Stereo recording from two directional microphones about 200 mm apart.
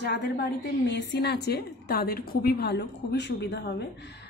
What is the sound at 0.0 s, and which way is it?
A woman's voice, 60° left (ahead or behind).